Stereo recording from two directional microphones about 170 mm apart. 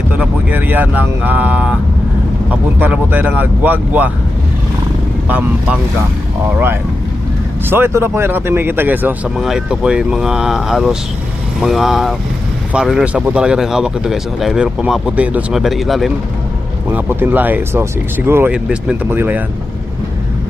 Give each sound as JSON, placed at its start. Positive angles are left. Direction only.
{"t": 0.2, "sound": "speech", "side_deg": -10}
{"t": 5.3, "sound": "speech", "side_deg": -5}
{"t": 7.7, "sound": "speech", "side_deg": -15}
{"t": 16.9, "sound": "speech", "side_deg": -10}